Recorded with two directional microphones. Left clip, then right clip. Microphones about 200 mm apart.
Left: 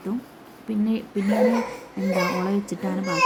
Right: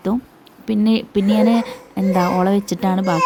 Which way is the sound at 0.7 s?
40° right (ahead or behind).